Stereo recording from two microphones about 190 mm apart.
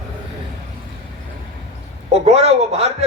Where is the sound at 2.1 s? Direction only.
35° right (ahead or behind).